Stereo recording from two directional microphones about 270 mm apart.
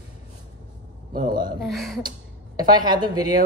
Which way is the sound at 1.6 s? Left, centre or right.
Centre.